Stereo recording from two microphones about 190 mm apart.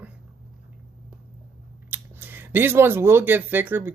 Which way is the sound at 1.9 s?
10° right (ahead or behind).